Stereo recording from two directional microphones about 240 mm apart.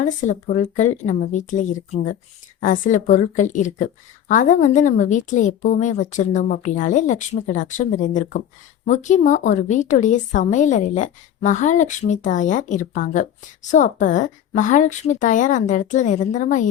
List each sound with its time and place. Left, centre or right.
0.0 s a woman's voice: left